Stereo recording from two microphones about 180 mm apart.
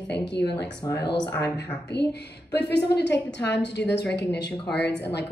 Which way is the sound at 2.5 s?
70° left (ahead or behind).